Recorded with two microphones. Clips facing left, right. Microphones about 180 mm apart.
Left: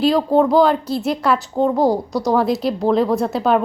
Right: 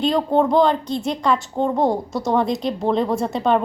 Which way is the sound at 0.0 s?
5° left (ahead or behind).